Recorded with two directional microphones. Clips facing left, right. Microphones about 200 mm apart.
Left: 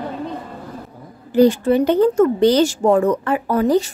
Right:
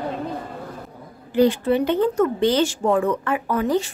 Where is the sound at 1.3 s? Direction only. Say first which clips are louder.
Left 4 dB; 45° left (ahead or behind).